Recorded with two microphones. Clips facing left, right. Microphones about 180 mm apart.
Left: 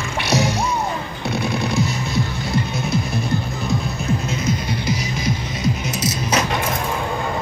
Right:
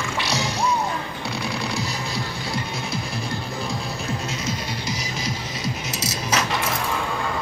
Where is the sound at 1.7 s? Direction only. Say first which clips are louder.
Left 6 dB; 25° left (ahead or behind).